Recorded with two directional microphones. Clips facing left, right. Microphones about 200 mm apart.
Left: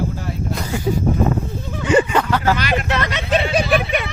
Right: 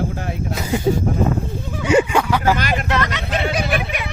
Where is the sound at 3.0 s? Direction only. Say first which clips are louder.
Left 3 dB; 20° left (ahead or behind).